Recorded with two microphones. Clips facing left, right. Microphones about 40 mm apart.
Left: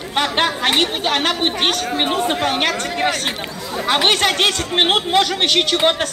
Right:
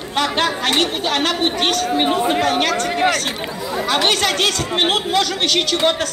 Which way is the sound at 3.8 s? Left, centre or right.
Left.